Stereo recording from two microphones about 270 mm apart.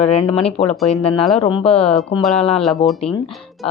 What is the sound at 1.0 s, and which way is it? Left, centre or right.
Speech, left.